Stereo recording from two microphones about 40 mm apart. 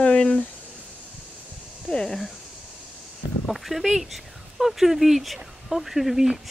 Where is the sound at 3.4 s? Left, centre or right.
Centre.